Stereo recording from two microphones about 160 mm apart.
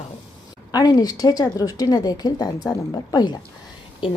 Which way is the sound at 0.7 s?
25° left (ahead or behind).